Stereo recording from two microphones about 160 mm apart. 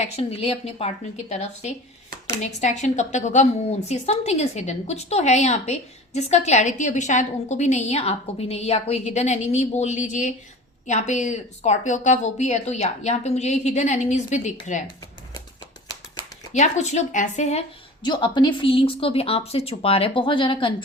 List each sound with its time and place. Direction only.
0.0 s a woman's voice: 40° left (ahead or behind)
16.5 s a woman's voice: 45° left (ahead or behind)
18.0 s a woman's voice: 30° left (ahead or behind)